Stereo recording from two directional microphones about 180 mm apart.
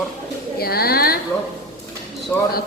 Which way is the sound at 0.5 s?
60° left (ahead or behind).